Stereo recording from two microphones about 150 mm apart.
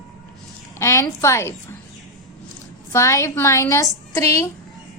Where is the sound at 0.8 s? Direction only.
20° left (ahead or behind).